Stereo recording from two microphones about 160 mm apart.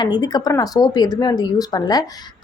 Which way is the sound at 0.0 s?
25° left (ahead or behind).